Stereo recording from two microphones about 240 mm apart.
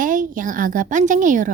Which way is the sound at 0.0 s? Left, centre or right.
Right.